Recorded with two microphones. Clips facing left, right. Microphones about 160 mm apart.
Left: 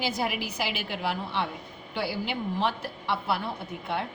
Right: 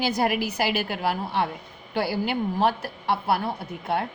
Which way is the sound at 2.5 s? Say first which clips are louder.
Right 5 dB; 40° right (ahead or behind).